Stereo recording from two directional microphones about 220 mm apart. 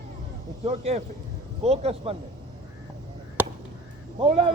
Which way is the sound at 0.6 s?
25° right (ahead or behind).